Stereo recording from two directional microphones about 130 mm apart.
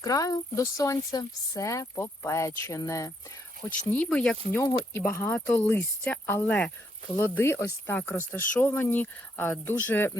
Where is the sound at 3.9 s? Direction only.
10° left (ahead or behind).